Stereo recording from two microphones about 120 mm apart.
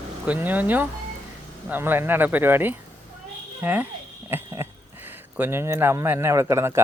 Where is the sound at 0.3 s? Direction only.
15° right (ahead or behind).